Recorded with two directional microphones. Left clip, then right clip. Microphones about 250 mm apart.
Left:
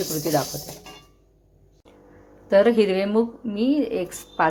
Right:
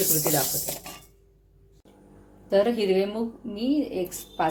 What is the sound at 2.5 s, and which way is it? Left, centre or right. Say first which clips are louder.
Speech: left 5 dB; centre.